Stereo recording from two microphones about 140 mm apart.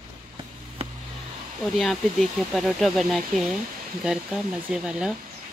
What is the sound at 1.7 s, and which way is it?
Speech, centre (ahead or behind).